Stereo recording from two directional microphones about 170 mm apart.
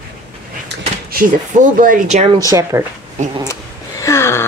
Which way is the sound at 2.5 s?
15° right (ahead or behind).